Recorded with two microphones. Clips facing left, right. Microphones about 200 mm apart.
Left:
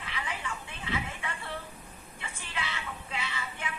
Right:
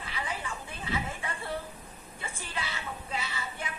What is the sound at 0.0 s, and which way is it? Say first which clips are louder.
Television: right 1 dB; 40° right (ahead or behind).